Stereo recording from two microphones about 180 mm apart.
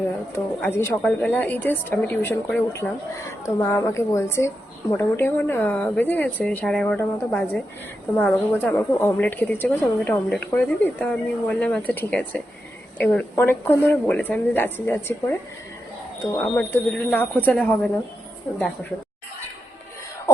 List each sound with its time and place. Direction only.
0.3 s a woman's voice: 15° left (ahead or behind)
16.4 s a woman's voice: 5° left (ahead or behind)